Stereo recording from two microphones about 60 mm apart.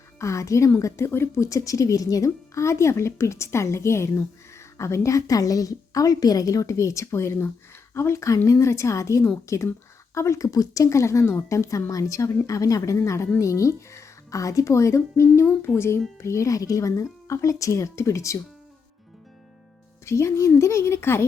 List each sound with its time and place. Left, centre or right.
0.2 s a woman's voice: left
1.5 s a woman's voice: left
11.4 s a woman's voice: left
20.1 s a child's voice: left